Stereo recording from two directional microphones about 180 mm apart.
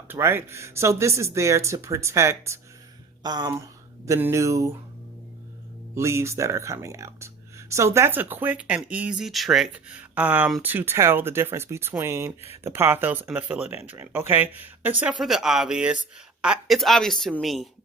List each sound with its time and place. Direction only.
0.1 s speech: 15° right (ahead or behind)
5.9 s speech: 15° right (ahead or behind)